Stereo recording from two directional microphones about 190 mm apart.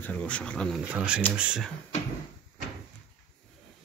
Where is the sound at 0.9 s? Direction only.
5° right (ahead or behind).